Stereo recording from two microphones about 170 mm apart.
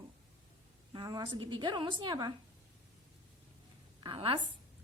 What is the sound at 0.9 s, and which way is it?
A woman's voice, 25° right (ahead or behind).